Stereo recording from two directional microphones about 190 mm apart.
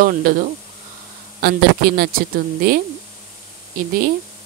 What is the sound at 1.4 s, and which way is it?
Speech, 55° right (ahead or behind).